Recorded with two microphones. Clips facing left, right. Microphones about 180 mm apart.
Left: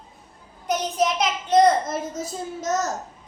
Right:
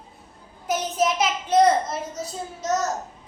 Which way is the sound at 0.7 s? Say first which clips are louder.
Even; centre (ahead or behind).